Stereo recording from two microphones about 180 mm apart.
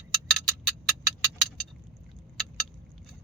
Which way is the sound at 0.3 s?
Centre (ahead or behind).